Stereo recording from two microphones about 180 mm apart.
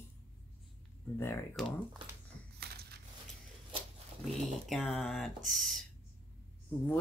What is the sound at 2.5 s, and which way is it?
Crushing, 60° right (ahead or behind).